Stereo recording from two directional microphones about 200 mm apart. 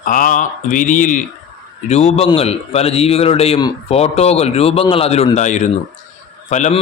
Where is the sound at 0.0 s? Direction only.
40° left (ahead or behind).